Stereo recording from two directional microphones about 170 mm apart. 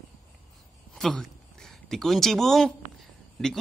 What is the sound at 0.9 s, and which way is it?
Speech, centre (ahead or behind).